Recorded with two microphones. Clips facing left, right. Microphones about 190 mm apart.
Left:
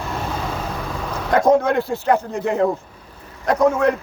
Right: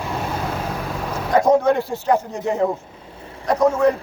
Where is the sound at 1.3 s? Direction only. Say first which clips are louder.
Even; 50° left (ahead or behind).